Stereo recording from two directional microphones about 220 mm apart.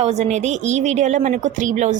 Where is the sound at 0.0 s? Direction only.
30° right (ahead or behind).